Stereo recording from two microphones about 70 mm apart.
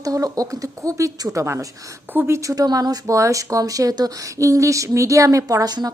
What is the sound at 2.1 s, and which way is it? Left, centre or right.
Speech, right.